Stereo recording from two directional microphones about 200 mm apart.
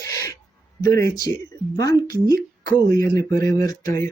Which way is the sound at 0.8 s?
15° left (ahead or behind).